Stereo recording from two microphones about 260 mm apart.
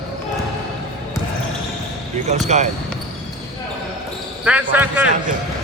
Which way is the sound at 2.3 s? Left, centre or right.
Right.